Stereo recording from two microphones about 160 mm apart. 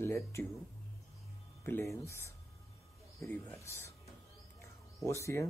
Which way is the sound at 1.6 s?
15° left (ahead or behind).